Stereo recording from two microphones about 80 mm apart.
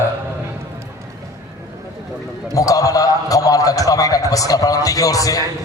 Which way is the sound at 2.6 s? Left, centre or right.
Left.